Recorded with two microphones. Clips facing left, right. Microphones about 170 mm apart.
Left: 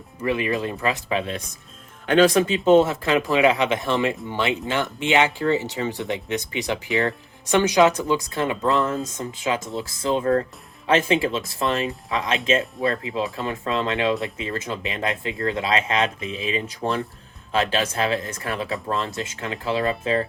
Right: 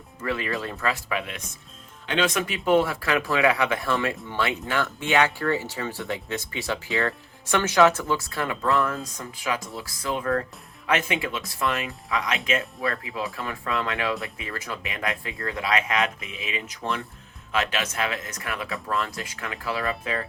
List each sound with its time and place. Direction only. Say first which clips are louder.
0.2 s speech: left 5 dB; 20° left (ahead or behind)